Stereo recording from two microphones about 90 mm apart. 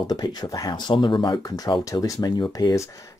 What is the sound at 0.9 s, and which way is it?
Speech, 60° left (ahead or behind).